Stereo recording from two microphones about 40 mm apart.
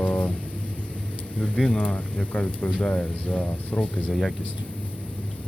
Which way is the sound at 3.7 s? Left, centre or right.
Centre.